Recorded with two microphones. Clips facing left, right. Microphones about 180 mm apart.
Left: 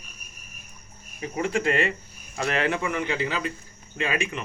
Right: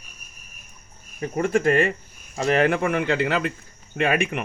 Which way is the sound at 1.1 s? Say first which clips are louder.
Right 5 dB; 45° right (ahead or behind).